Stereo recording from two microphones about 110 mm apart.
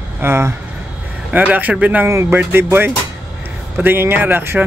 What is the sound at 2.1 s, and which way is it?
Speech, 25° right (ahead or behind).